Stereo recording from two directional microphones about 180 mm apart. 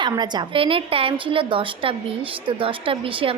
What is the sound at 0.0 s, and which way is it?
A woman's voice, 25° right (ahead or behind).